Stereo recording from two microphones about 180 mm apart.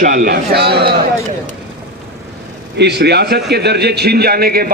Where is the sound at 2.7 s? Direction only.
70° right (ahead or behind).